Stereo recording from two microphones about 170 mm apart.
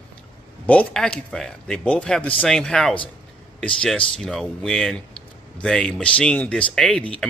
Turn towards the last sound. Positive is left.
turn(degrees=5)  # may be behind; listen again after turning